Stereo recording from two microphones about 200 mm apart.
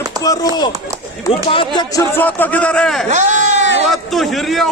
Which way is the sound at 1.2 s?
25° left (ahead or behind).